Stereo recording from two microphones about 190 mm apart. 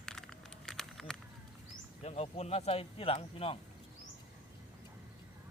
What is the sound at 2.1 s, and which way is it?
Speech, 35° left (ahead or behind).